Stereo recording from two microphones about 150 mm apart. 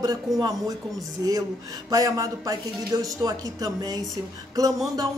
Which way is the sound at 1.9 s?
25° right (ahead or behind).